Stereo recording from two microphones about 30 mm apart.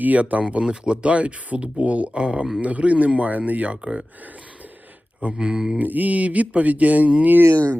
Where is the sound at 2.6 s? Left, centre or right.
Right.